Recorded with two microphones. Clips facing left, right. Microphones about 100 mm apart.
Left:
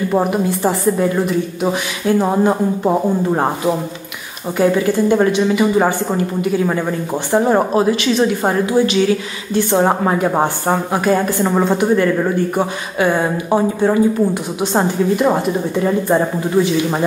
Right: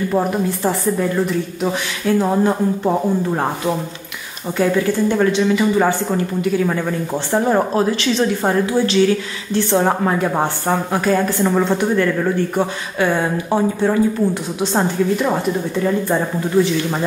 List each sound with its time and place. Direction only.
0.1 s a woman's voice: 15° left (ahead or behind)
7.3 s a woman's voice: 15° left (ahead or behind)